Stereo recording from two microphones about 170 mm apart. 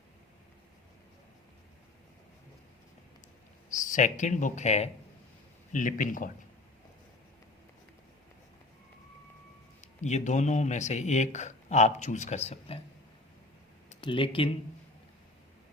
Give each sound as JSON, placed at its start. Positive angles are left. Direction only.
{"t": 3.8, "sound": "speech", "side_deg": 45}
{"t": 9.8, "sound": "speech", "side_deg": 45}
{"t": 14.0, "sound": "speech", "side_deg": 30}